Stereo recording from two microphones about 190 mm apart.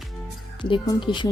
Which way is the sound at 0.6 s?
25° left (ahead or behind).